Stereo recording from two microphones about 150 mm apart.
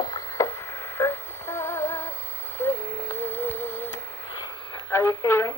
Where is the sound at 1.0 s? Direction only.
15° left (ahead or behind).